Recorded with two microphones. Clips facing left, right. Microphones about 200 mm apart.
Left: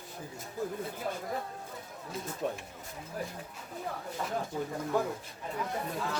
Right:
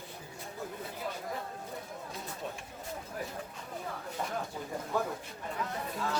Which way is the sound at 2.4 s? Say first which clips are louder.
Left 8 dB; 50° left (ahead or behind).